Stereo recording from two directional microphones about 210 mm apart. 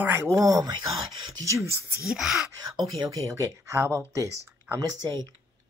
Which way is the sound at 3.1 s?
15° right (ahead or behind).